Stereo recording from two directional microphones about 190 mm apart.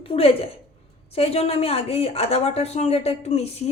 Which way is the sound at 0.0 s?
30° left (ahead or behind).